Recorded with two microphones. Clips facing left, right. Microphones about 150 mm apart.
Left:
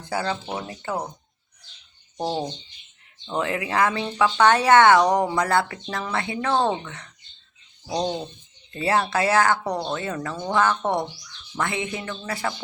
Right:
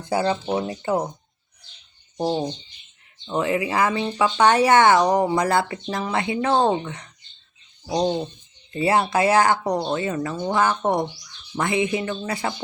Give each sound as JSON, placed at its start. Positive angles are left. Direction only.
{"t": 0.1, "sound": "speech", "side_deg": -20}
{"t": 3.2, "sound": "speech", "side_deg": -5}